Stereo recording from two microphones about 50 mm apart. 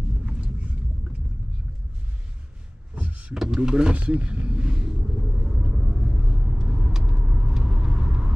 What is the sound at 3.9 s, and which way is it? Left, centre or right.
Vehicle, right.